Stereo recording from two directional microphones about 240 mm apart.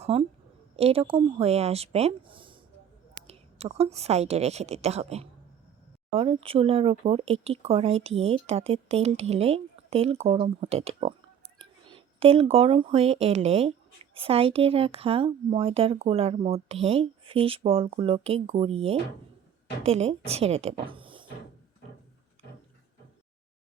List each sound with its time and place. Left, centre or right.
0.0 s a woman's voice: right